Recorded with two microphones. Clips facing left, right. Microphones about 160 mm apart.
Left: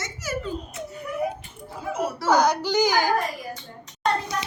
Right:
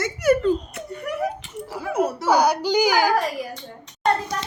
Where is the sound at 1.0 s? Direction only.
80° right.